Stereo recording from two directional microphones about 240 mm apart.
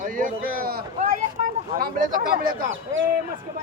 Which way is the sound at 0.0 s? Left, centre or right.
Right.